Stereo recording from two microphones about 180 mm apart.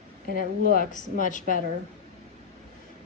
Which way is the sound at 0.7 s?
50° left (ahead or behind).